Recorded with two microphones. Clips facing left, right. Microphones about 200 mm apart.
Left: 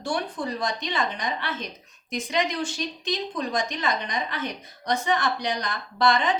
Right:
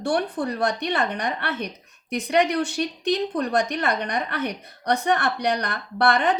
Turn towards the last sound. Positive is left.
turn(degrees=-60)  # may be behind; listen again after turning